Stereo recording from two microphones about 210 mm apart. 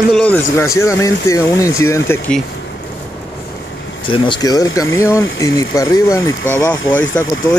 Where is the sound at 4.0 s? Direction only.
25° left (ahead or behind).